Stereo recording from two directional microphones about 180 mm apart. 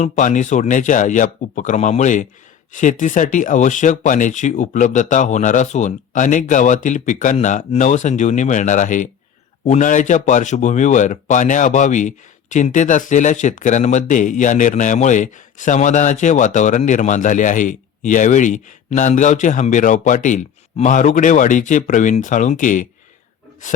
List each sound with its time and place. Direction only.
0.0 s speech: 45° left (ahead or behind)